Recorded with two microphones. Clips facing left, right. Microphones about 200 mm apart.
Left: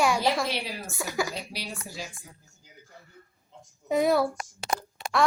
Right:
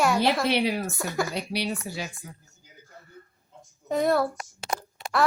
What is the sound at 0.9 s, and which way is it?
Speech, centre (ahead or behind).